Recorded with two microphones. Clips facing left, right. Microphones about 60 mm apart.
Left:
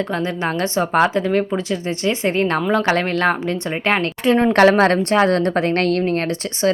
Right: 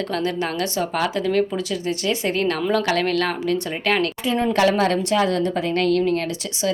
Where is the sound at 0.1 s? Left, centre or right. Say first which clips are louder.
Left 2 dB; left.